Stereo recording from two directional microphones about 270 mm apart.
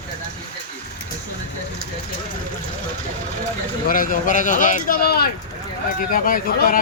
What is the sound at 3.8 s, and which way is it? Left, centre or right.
Speech, left.